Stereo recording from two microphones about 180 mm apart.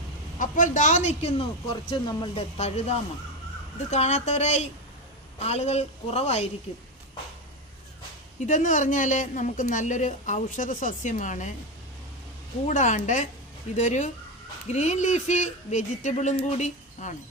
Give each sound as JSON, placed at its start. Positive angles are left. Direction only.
{"t": 0.3, "sound": "speech", "side_deg": 45}
{"t": 8.4, "sound": "speech", "side_deg": 45}
{"t": 12.6, "sound": "speech", "side_deg": 45}